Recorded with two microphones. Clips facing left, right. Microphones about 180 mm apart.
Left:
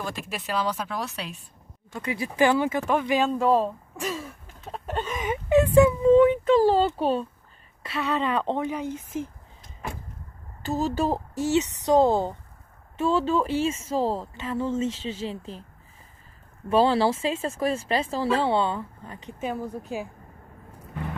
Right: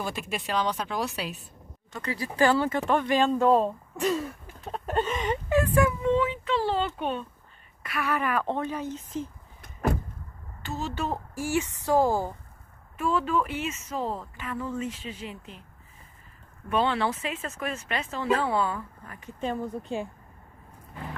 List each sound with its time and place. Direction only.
0.0 s speech: centre (ahead or behind)
2.0 s speech: 15° left (ahead or behind)
4.8 s a sound: 5° left (ahead or behind)
5.5 s a sound: 25° left (ahead or behind)
6.1 s a sound: 50° left (ahead or behind)
7.0 s speech: 35° left (ahead or behind)
7.8 s speech: 25° left (ahead or behind)
9.6 s door: 55° right (ahead or behind)
10.6 s speech: 35° left (ahead or behind)
11.3 s speech: 20° left (ahead or behind)
16.6 s speech: 35° left (ahead or behind)
19.4 s speech: 5° left (ahead or behind)